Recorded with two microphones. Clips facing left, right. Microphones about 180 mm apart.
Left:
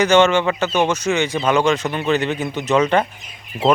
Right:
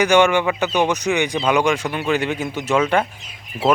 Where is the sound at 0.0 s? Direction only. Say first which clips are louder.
Left 1 dB; 10° right (ahead or behind).